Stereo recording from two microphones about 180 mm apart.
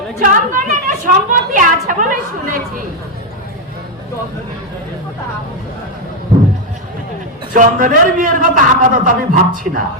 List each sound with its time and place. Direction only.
0.2 s a woman's voice: 45° right (ahead or behind)
7.5 s a woman's voice: 45° right (ahead or behind)